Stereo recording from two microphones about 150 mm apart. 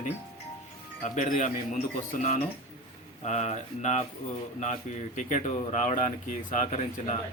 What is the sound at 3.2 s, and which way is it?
Speech, 50° left (ahead or behind).